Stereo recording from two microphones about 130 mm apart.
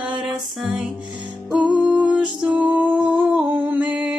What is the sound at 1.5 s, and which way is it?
Music, 10° right (ahead or behind).